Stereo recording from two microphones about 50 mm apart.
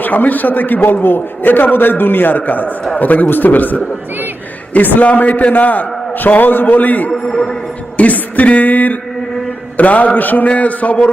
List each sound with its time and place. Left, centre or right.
0.0 s a man's voice: left
7.1 s a man's voice: centre
7.9 s a man's voice: left